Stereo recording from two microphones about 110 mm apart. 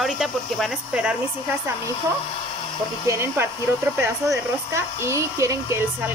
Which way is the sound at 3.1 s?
20° right (ahead or behind).